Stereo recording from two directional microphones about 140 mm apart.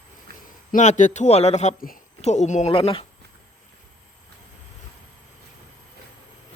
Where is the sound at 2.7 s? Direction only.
40° left (ahead or behind).